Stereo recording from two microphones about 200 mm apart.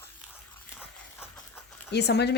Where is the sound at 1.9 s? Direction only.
55° left (ahead or behind).